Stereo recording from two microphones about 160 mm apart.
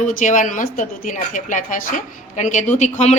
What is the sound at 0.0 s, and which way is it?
A woman's voice, 55° left (ahead or behind).